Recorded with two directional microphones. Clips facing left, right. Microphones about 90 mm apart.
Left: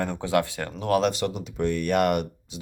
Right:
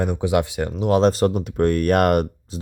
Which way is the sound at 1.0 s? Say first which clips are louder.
Right 8 dB; 40° right (ahead or behind).